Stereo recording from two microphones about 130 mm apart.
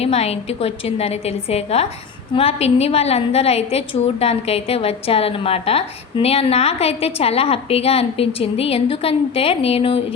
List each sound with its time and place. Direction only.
0.0 s a woman's voice: 55° left (ahead or behind)